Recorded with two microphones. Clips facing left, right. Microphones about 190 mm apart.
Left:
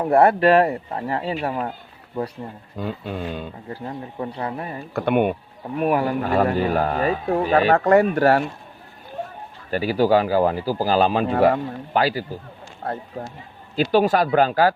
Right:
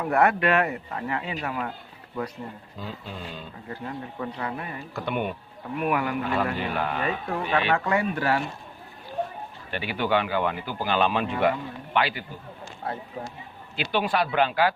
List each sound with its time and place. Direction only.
0.0 s speech: 30° left (ahead or behind)
2.7 s speech: 55° left (ahead or behind)
3.7 s speech: 30° left (ahead or behind)
4.9 s speech: 55° left (ahead or behind)
5.7 s speech: 35° left (ahead or behind)
9.6 s speech: 40° left (ahead or behind)
12.8 s a sound: 45° left (ahead or behind)
13.7 s speech: 40° left (ahead or behind)